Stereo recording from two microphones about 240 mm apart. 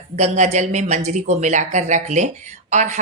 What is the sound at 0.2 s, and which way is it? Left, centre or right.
Speech, right.